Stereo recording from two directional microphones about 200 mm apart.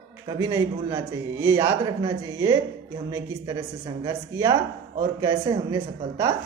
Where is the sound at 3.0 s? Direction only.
15° right (ahead or behind).